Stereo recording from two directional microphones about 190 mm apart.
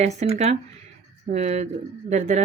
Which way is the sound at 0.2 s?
35° right (ahead or behind).